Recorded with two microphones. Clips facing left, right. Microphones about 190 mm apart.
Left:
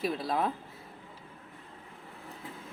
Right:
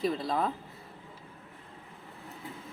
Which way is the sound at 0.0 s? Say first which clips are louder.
Right 1 dB; 5° left (ahead or behind).